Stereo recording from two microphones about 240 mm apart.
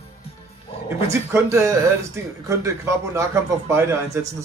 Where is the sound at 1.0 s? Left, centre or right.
Centre.